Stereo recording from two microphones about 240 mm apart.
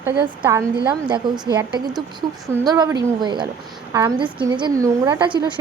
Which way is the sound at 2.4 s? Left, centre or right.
Centre.